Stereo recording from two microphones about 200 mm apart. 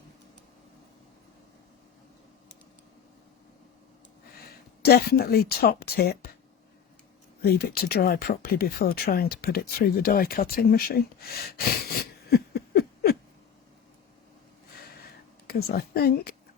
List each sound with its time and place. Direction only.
4.8 s speech: 50° left (ahead or behind)
7.4 s speech: 50° left (ahead or behind)
15.0 s a sound: 50° left (ahead or behind)